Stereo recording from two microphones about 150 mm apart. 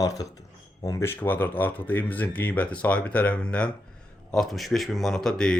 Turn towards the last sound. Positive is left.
turn(degrees=5)  # may be behind; listen again after turning